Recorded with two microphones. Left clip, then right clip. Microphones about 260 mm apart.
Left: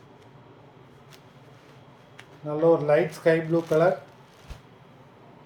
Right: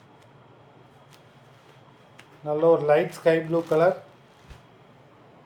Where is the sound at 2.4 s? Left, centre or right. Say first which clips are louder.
Right 1 dB; centre.